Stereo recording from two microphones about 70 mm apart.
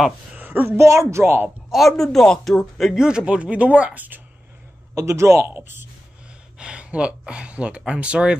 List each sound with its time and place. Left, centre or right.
0.4 s a sound: right
0.7 s a woman's voice: right
1.7 s a man's voice: centre; by 4.2 s right
4.9 s a woman's voice: right
5.5 s speech: right
6.6 s speech: centre